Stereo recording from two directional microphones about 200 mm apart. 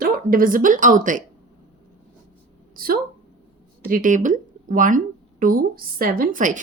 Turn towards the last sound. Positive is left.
turn(degrees=-40)  # may be behind; listen again after turning